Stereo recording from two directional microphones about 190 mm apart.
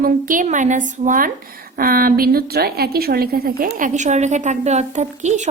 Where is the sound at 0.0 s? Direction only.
45° right (ahead or behind).